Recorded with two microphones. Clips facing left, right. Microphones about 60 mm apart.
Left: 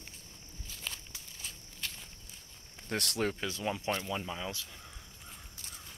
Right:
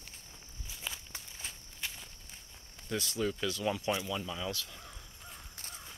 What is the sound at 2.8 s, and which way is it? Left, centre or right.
Speech, left.